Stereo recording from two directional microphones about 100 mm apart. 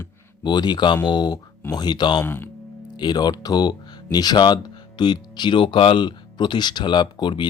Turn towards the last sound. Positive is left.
turn(degrees=50)  # may be behind; listen again after turning